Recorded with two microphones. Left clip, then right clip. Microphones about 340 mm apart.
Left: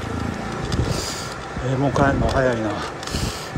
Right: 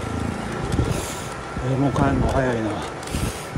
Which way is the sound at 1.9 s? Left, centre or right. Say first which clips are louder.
Left 5 dB; centre.